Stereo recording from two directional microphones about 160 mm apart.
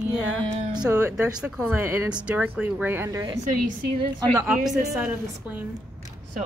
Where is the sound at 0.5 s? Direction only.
30° right (ahead or behind).